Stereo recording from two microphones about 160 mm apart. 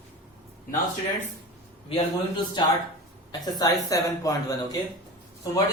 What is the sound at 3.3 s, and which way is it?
A woman's voice, 25° left (ahead or behind).